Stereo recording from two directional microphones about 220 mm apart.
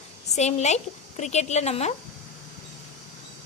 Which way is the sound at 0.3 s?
30° left (ahead or behind).